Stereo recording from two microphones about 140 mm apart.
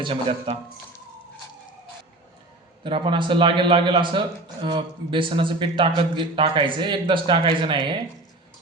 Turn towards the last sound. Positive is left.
turn(degrees=-35)  # may be behind; listen again after turning